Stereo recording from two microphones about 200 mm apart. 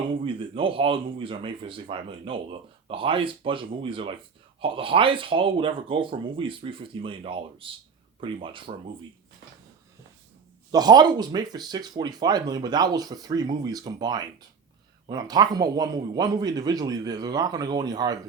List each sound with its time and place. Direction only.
0.1 s speech: 25° right (ahead or behind)
10.7 s speech: 20° right (ahead or behind)